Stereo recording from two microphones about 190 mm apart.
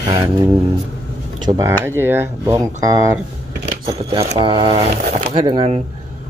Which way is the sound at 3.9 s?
30° right (ahead or behind).